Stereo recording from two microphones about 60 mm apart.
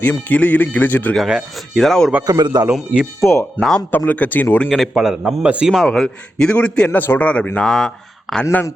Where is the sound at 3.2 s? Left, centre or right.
Left.